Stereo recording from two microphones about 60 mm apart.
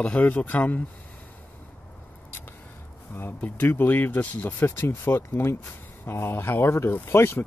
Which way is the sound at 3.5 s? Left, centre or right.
Left.